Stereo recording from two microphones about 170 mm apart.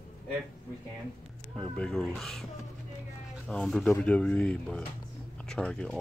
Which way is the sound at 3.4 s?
5° left (ahead or behind).